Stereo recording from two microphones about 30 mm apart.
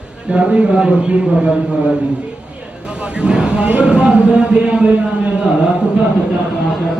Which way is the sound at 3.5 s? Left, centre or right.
Right.